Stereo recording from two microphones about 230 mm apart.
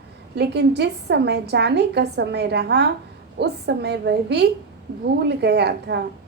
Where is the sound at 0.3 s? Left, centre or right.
Right.